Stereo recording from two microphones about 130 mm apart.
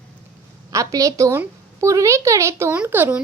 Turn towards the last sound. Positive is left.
turn(degrees=-15)  # may be behind; listen again after turning